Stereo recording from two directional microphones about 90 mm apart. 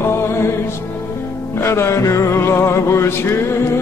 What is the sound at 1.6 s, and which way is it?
Music, 30° left (ahead or behind).